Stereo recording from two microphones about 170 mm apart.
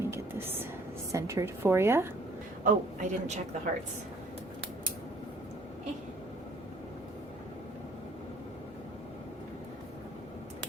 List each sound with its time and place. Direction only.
0.0 s a sound: 15° right (ahead or behind)
1.1 s a woman's voice: 20° right (ahead or behind)
2.6 s a woman's voice: 45° right (ahead or behind)